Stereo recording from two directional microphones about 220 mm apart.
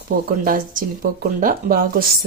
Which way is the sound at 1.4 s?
40° right (ahead or behind).